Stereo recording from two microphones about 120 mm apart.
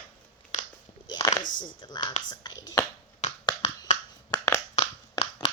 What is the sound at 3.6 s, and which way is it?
Finger snapping, 70° left (ahead or behind).